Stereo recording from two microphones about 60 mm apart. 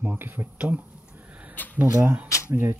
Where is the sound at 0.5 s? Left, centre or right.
Right.